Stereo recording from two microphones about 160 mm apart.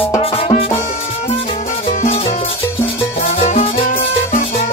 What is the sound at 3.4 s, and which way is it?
Music, 40° left (ahead or behind).